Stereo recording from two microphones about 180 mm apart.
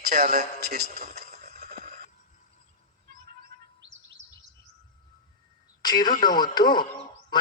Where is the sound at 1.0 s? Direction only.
40° right (ahead or behind).